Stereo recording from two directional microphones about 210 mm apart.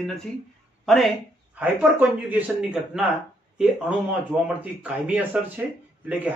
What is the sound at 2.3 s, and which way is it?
Speech, 5° right (ahead or behind).